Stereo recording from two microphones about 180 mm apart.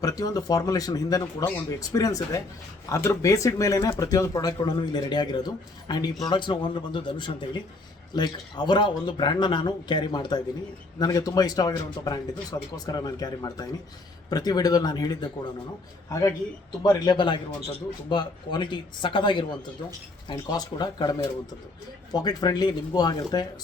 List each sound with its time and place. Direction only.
0.0 s speech: 20° left (ahead or behind)
16.8 s speech: 20° left (ahead or behind)